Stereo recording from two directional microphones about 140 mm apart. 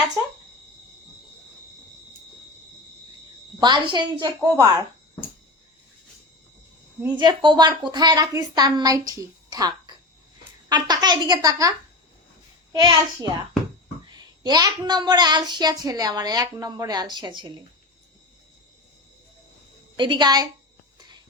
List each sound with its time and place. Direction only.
3.6 s a woman's voice: 35° right (ahead or behind)
7.2 s a child's voice: 35° right (ahead or behind)
12.7 s a woman's voice: 35° right (ahead or behind)
20.0 s a woman's voice: 35° right (ahead or behind)